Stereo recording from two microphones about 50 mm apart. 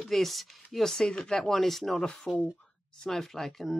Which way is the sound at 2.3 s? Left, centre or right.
Left.